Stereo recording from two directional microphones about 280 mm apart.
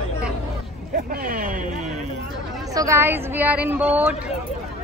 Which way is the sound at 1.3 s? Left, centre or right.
Right.